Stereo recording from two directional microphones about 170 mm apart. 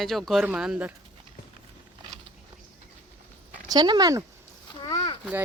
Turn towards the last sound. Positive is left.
turn(degrees=25)  # may be behind; listen again after turning